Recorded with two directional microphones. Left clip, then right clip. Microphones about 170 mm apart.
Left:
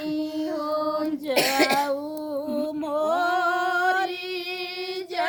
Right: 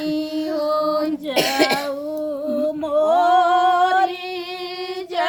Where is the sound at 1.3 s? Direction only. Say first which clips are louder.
Right 2 dB; 35° left (ahead or behind).